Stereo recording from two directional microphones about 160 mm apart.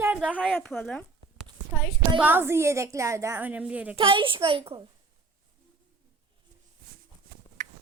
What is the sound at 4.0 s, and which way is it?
Speech, 30° right (ahead or behind).